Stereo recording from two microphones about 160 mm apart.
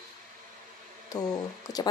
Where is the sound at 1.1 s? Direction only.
25° left (ahead or behind).